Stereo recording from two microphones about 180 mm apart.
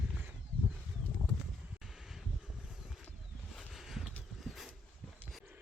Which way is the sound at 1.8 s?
Centre (ahead or behind).